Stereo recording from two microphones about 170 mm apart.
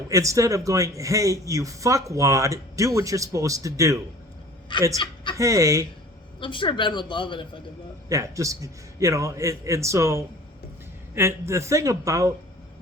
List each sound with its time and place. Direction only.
0.1 s speech: 20° right (ahead or behind)
4.7 s speech: 30° left (ahead or behind)
5.4 s speech: 20° right (ahead or behind)
6.4 s speech: 30° left (ahead or behind)
8.1 s a man's voice: 20° right (ahead or behind)